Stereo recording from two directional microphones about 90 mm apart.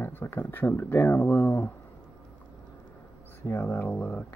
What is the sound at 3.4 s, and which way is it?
Speech, 25° left (ahead or behind).